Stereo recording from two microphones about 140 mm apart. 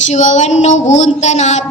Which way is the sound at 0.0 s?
55° left (ahead or behind).